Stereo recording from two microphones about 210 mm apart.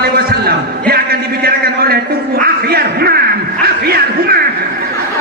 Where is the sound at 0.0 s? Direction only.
45° right (ahead or behind).